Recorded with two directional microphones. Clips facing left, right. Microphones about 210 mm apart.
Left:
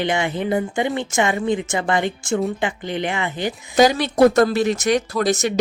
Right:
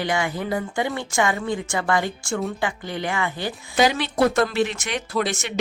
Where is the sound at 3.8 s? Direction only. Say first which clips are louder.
Left 5 dB; 40° left (ahead or behind).